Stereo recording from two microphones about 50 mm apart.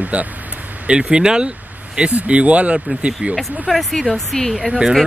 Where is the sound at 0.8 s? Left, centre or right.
Centre.